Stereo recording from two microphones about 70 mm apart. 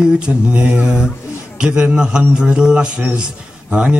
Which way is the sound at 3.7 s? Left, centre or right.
Centre.